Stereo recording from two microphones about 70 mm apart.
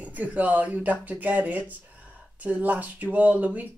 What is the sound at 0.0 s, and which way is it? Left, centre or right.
Speech, right.